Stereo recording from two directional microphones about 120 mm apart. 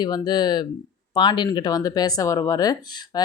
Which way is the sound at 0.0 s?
35° left (ahead or behind).